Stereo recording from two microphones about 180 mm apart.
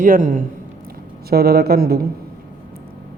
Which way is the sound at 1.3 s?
60° right (ahead or behind).